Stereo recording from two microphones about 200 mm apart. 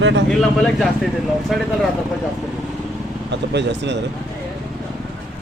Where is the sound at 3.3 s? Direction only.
60° right (ahead or behind).